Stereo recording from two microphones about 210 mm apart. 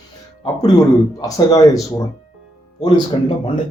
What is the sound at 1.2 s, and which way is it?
A man's voice, 15° left (ahead or behind).